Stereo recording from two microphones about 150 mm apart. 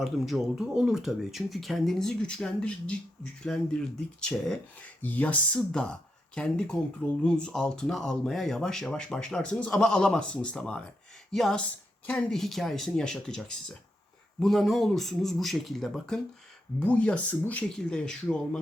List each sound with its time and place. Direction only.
0.0 s speech: centre (ahead or behind)